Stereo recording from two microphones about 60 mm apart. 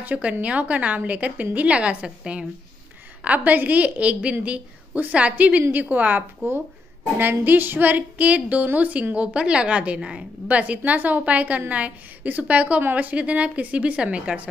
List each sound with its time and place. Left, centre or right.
0.0 s a woman's voice: right
10.5 s a woman's voice: right